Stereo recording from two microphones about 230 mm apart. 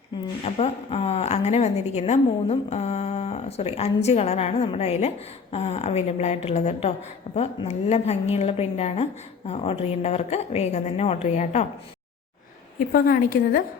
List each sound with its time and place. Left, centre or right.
0.4 s a woman's voice: left
12.9 s a woman's voice: left